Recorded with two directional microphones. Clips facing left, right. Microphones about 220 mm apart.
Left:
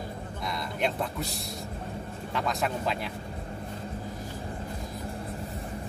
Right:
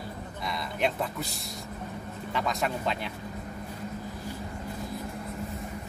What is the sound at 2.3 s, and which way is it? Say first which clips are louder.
Speech: even; centre (ahead or behind).